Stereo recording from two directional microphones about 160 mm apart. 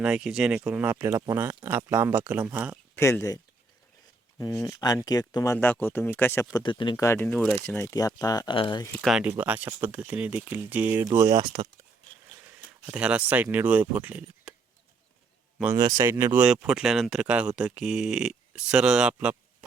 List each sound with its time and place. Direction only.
0.0 s speech: 5° right (ahead or behind)
2.9 s speech: 20° left (ahead or behind)
4.6 s speech: 25° left (ahead or behind)
6.9 s speech: 20° left (ahead or behind)
9.0 s speech: 5° right (ahead or behind); by 11.7 s 25° right (ahead or behind)
12.8 s speech: 5° right (ahead or behind)
15.7 s speech: 20° right (ahead or behind); by 19.4 s 5° right (ahead or behind)